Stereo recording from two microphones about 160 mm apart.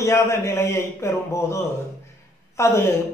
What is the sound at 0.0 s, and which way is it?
A man's voice, 15° left (ahead or behind).